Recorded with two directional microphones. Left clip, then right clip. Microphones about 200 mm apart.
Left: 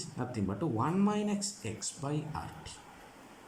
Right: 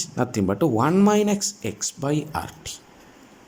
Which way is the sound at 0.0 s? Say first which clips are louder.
Right 14 dB; 50° right (ahead or behind).